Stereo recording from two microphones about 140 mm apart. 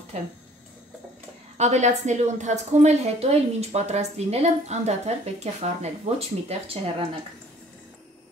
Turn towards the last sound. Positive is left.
turn(degrees=-40)  # may be behind; listen again after turning